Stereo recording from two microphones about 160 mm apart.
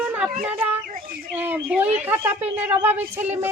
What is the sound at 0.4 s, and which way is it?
Speech, 10° right (ahead or behind).